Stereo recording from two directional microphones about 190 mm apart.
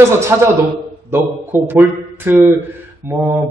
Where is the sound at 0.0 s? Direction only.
15° right (ahead or behind).